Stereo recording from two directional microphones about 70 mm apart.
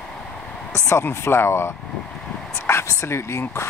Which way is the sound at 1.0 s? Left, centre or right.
Left.